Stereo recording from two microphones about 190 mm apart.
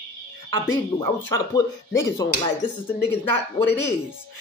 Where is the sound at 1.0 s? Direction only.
20° left (ahead or behind).